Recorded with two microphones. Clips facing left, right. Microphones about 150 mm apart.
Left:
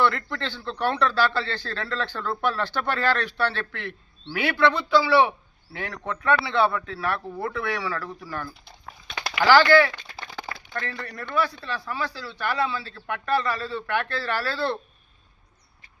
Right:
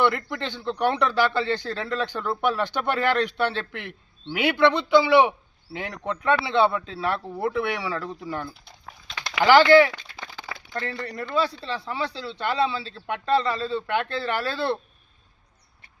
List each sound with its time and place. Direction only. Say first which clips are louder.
0.0 s a man's voice: right 1 dB; 15° right (ahead or behind)
8.4 s a sound: even; centre (ahead or behind)
9.4 s a man's voice: right 2 dB; 20° right (ahead or behind)